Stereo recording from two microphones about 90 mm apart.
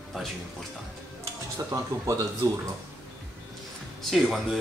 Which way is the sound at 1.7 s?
35° right (ahead or behind).